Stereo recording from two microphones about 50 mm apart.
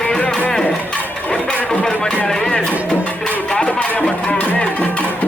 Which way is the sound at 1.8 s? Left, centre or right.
Centre.